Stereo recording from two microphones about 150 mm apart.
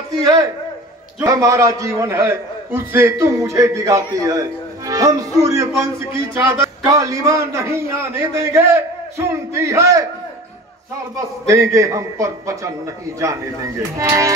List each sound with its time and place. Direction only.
1.2 s a man's voice: 20° right (ahead or behind)
11.4 s a man's voice: 20° right (ahead or behind)
13.9 s a man's voice: 20° right (ahead or behind)